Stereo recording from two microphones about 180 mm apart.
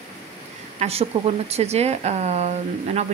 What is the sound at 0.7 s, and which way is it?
Speech, 35° right (ahead or behind).